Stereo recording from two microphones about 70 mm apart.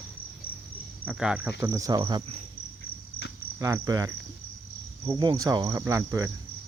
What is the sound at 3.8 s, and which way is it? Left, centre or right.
Cricket, right.